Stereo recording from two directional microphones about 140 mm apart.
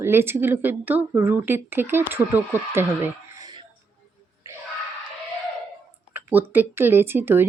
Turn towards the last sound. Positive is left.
turn(degrees=-15)  # may be behind; listen again after turning